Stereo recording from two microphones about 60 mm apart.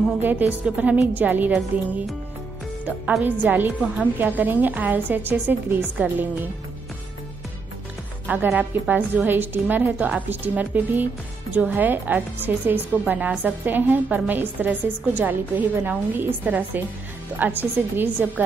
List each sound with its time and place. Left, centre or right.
0.2 s a woman's voice: right
3.3 s a woman's voice: right
8.5 s a woman's voice: right